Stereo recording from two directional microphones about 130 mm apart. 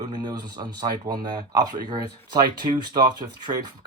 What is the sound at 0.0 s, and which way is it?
Speech, 30° right (ahead or behind).